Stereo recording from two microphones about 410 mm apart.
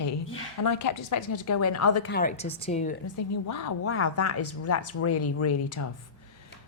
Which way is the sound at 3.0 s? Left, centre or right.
Left.